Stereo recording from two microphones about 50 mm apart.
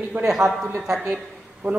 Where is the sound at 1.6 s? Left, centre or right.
Right.